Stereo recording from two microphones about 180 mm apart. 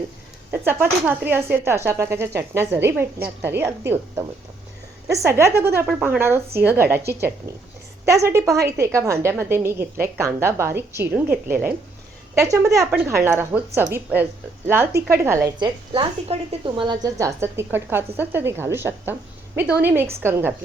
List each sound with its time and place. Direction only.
0.5 s speech: 10° right (ahead or behind)
7.0 s a woman's voice: 65° right (ahead or behind)
7.5 s speech: 15° right (ahead or behind)
15.5 s a woman's voice: 25° right (ahead or behind)